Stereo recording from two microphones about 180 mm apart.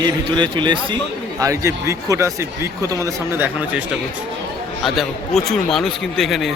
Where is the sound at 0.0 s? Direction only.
25° right (ahead or behind); by 6.5 s centre (ahead or behind).